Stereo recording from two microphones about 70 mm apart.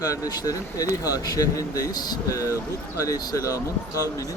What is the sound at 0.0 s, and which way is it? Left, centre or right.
Speech, left.